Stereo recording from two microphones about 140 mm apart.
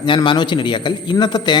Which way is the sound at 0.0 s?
35° left (ahead or behind).